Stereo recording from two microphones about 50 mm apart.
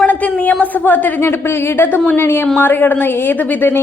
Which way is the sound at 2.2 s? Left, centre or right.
Left.